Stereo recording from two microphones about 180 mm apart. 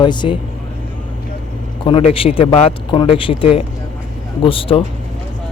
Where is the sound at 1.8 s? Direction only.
30° left (ahead or behind).